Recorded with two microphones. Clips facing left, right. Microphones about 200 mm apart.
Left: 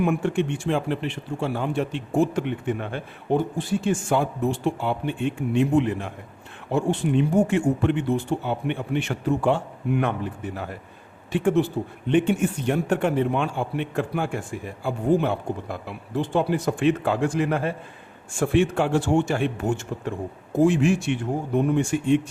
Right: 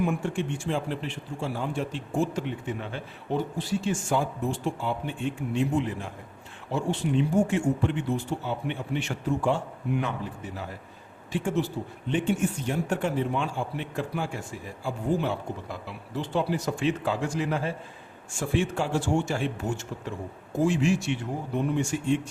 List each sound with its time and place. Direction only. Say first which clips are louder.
0.0 s speech: left 5 dB; 60° left (ahead or behind)